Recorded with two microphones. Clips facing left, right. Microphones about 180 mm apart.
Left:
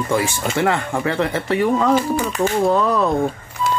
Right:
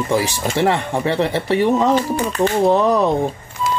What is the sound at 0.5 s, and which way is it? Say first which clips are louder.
Speech: right 2 dB; 25° right (ahead or behind).